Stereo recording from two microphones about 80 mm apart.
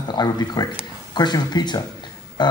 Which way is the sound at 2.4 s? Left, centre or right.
Left.